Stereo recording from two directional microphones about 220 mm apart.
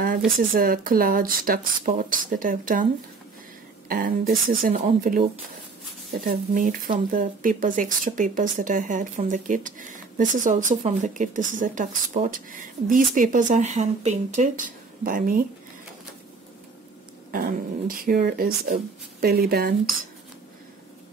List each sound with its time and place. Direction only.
0.4 s speech: 40° right (ahead or behind)
3.9 s speech: 40° right (ahead or behind)
6.2 s speech: 40° right (ahead or behind)
17.3 s speech: 40° right (ahead or behind)